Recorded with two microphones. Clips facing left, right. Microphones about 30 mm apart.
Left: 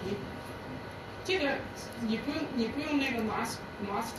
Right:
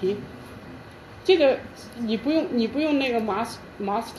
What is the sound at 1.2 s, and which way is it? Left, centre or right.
A woman's voice, right.